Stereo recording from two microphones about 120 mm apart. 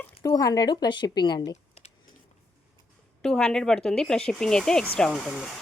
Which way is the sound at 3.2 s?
5° left (ahead or behind).